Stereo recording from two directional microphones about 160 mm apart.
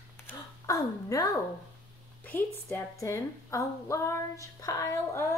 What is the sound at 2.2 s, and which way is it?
A woman's voice, 10° left (ahead or behind).